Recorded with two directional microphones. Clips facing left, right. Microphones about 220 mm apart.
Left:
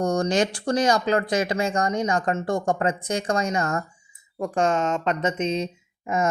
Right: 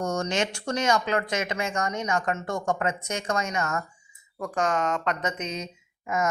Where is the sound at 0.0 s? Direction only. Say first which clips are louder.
Left 5 dB; 35° left (ahead or behind).